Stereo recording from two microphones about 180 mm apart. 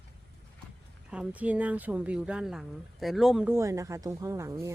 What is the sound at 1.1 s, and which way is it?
Speech, 5° right (ahead or behind).